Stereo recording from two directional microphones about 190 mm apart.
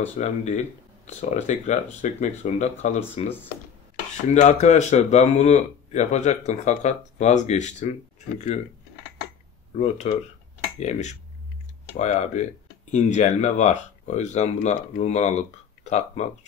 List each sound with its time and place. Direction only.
0.2 s speech: 40° left (ahead or behind)
8.2 s a sound: 40° left (ahead or behind)
9.8 s speech: 35° left (ahead or behind)